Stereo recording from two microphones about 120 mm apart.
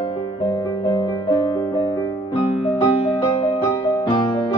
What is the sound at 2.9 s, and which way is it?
Music, 45° left (ahead or behind).